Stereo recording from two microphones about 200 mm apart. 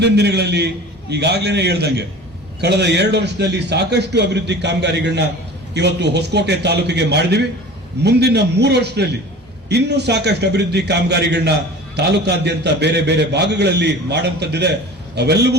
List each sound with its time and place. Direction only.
0.0 s a man's voice: 55° right (ahead or behind)